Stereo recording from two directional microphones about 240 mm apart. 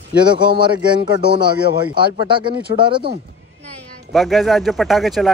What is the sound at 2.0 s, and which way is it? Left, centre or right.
Speech, centre.